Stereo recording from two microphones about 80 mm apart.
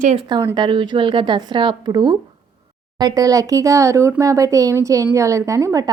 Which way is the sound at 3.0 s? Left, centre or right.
Right.